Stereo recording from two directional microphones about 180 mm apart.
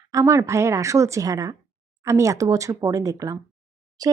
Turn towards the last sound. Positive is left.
turn(degrees=-20)  # may be behind; listen again after turning